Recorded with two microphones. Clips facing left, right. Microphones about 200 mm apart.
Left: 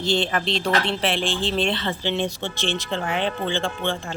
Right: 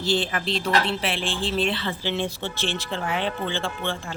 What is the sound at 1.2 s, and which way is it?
Speech, 35° right (ahead or behind).